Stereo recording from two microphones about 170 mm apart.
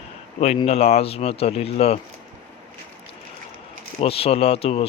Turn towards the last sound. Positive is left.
turn(degrees=35)  # may be behind; listen again after turning